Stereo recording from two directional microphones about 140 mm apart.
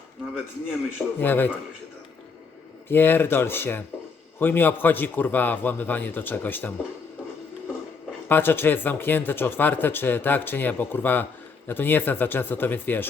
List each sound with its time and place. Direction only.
1.2 s speech: 15° left (ahead or behind)
2.9 s speech: 15° left (ahead or behind)
8.3 s speech: 15° left (ahead or behind)